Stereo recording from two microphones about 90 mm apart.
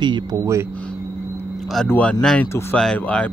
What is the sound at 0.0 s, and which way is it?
Speech, 55° right (ahead or behind).